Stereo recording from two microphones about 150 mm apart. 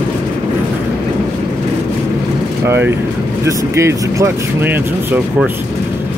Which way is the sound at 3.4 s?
20° right (ahead or behind).